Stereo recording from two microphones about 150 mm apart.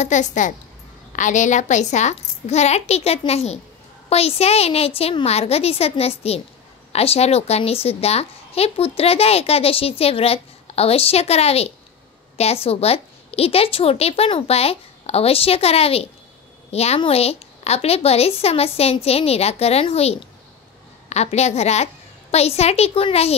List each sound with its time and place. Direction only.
0.0 s a woman's voice: 55° left (ahead or behind)